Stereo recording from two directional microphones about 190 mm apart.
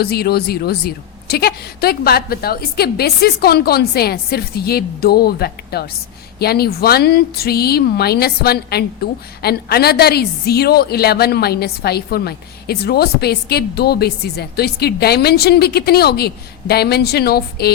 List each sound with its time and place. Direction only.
0.0 s speech: 55° left (ahead or behind)